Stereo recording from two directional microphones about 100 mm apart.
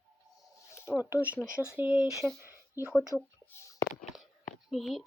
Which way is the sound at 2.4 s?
25° right (ahead or behind).